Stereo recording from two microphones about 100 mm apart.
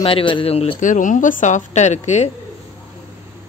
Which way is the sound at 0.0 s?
60° left (ahead or behind).